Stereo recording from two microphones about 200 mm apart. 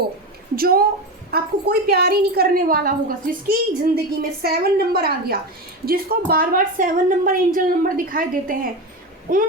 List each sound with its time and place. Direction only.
0.5 s a woman's voice: 50° right (ahead or behind)